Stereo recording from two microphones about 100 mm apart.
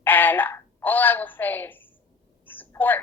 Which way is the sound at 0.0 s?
20° left (ahead or behind).